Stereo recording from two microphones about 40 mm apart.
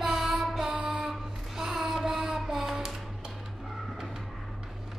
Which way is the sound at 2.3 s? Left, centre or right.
Centre.